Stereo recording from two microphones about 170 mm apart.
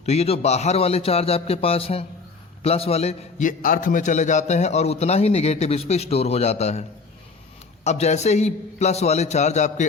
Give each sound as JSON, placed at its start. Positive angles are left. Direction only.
{"t": 0.0, "sound": "a man's voice", "side_deg": 40}
{"t": 7.9, "sound": "a man's voice", "side_deg": 40}